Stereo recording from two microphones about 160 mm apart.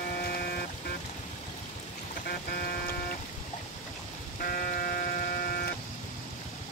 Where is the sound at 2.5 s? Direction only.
70° left (ahead or behind).